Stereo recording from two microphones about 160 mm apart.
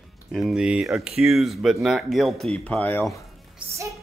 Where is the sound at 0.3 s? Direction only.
Centre (ahead or behind).